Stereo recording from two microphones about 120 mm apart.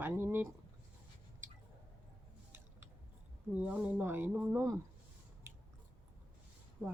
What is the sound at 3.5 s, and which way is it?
Speech, 10° right (ahead or behind).